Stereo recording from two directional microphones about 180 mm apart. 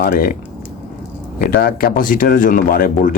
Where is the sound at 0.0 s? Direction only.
55° left (ahead or behind).